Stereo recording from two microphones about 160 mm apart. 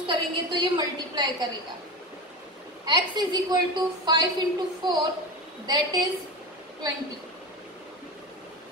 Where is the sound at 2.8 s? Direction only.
25° right (ahead or behind).